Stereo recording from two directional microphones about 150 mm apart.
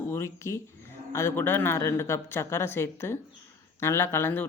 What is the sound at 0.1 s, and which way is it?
A woman's voice, 20° left (ahead or behind).